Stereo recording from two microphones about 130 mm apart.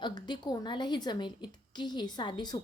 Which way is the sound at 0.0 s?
35° left (ahead or behind).